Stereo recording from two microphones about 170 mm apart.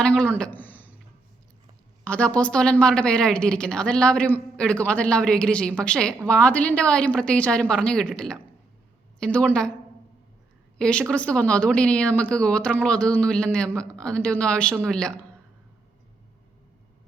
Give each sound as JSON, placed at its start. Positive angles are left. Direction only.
{"t": 0.0, "sound": "a sound", "side_deg": 5}
{"t": 2.0, "sound": "a woman's voice", "side_deg": 5}
{"t": 10.8, "sound": "a woman's voice", "side_deg": 5}